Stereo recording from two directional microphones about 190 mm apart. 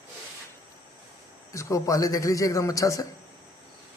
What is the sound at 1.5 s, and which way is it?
Speech, 15° left (ahead or behind).